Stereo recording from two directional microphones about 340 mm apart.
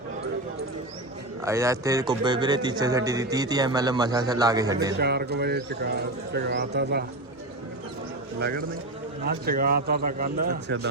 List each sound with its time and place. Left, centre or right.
1.4 s a man's voice: centre
4.9 s speech: right
8.4 s speech: right